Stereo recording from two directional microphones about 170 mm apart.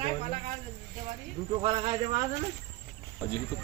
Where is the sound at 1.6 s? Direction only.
30° right (ahead or behind).